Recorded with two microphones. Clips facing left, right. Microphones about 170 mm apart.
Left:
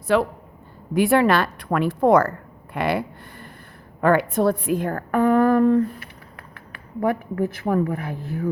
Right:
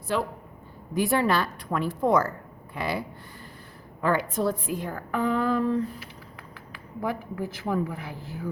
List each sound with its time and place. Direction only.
0.1 s a woman's voice: 75° left (ahead or behind)
4.0 s a woman's voice: 60° left (ahead or behind)